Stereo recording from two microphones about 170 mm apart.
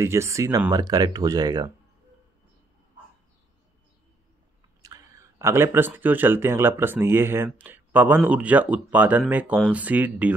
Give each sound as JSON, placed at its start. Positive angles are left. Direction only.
{"t": 0.0, "sound": "speech", "side_deg": -15}
{"t": 4.8, "sound": "speech", "side_deg": -20}